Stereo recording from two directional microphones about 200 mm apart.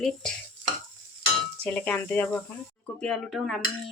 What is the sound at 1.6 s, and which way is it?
A woman's voice, 5° left (ahead or behind).